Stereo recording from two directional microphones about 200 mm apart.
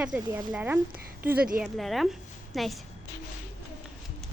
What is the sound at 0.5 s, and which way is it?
Speech, 10° right (ahead or behind).